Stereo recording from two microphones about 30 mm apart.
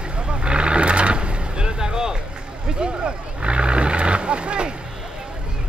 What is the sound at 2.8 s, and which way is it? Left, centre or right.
Vehicle, right.